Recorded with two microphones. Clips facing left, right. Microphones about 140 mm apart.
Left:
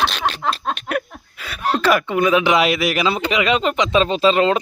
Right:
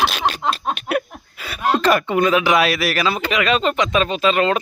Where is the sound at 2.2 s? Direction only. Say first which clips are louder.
Left 2 dB; 20° left (ahead or behind).